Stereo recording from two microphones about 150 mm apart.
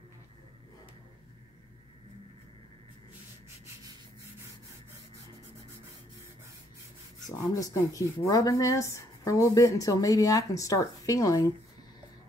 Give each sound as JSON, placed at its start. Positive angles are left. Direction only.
{"t": 7.5, "sound": "a woman's voice", "side_deg": 25}